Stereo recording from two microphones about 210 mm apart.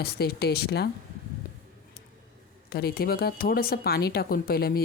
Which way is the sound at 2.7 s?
45° left (ahead or behind).